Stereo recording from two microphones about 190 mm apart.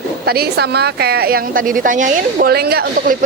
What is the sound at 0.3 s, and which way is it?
Speech, 55° right (ahead or behind).